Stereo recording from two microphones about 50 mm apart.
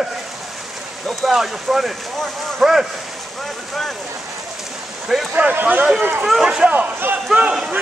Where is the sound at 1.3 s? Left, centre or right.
Centre.